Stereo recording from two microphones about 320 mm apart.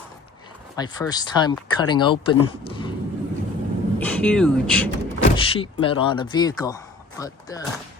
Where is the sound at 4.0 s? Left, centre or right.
Centre.